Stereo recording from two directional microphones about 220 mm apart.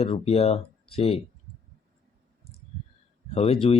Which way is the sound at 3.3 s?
30° left (ahead or behind).